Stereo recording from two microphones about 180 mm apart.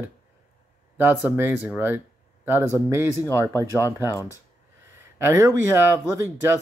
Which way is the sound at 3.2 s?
15° left (ahead or behind).